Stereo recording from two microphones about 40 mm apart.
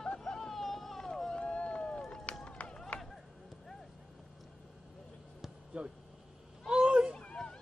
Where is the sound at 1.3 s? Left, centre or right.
Left.